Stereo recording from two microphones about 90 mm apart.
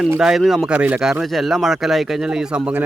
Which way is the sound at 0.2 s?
5° right (ahead or behind).